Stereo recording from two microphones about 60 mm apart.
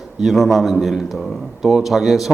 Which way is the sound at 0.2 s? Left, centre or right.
Centre.